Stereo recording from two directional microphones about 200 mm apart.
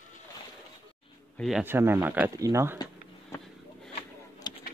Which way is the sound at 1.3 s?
Centre (ahead or behind).